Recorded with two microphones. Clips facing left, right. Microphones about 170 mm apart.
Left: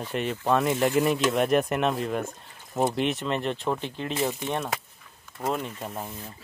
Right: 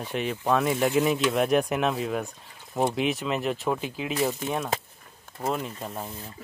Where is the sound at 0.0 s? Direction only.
Centre (ahead or behind).